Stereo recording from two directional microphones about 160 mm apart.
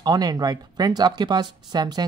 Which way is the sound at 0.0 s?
25° right (ahead or behind).